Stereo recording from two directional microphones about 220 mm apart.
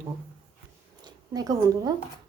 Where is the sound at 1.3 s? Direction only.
15° right (ahead or behind).